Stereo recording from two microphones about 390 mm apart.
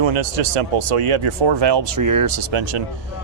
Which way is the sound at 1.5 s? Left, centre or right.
Right.